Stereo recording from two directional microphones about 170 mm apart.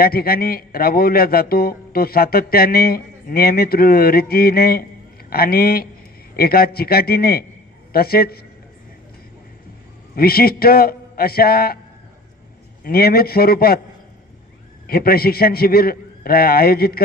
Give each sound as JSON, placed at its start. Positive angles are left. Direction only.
{"t": 0.0, "sound": "a man's voice", "side_deg": 60}
{"t": 10.1, "sound": "a man's voice", "side_deg": 60}
{"t": 12.8, "sound": "a man's voice", "side_deg": 65}
{"t": 14.9, "sound": "a man's voice", "side_deg": 60}